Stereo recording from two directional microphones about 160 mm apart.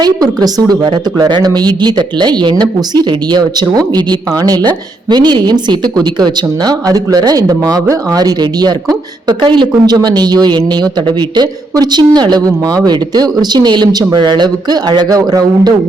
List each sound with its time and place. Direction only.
0.0 s a woman's voice: 25° right (ahead or behind)